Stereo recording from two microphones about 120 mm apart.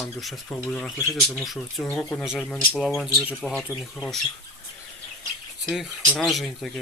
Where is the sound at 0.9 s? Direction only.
25° left (ahead or behind).